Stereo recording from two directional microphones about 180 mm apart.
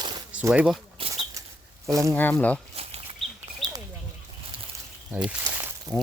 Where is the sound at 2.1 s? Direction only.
10° left (ahead or behind).